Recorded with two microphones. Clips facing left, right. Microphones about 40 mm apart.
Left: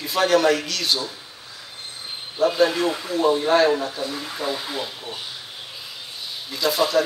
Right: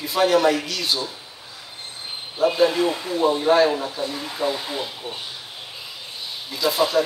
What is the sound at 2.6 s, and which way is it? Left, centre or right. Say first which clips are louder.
Speech: right 1 dB; centre.